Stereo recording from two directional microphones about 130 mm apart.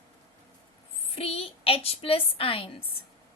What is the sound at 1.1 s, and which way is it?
Speech, 50° left (ahead or behind).